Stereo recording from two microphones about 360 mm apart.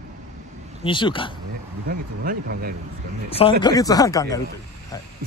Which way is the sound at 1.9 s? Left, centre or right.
Right.